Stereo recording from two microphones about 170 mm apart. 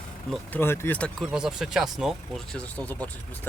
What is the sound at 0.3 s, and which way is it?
Speech, 10° left (ahead or behind).